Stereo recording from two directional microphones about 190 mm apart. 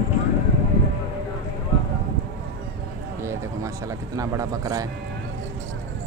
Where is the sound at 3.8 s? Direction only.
15° right (ahead or behind).